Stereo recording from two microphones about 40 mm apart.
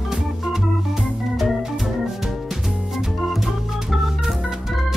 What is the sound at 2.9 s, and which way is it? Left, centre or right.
Organ, centre.